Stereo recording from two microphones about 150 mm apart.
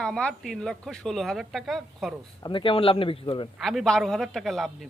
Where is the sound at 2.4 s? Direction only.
30° left (ahead or behind).